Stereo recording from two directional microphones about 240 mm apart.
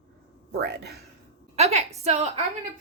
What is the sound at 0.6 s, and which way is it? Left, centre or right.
Speech, right.